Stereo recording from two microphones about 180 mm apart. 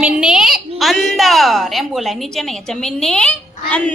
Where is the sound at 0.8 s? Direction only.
Centre (ahead or behind).